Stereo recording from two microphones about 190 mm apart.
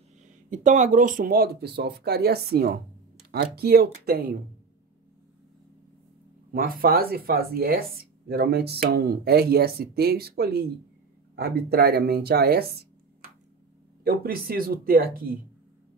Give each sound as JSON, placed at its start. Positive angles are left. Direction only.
{"t": 0.5, "sound": "speech", "side_deg": -40}
{"t": 6.5, "sound": "speech", "side_deg": -50}
{"t": 14.0, "sound": "speech", "side_deg": -50}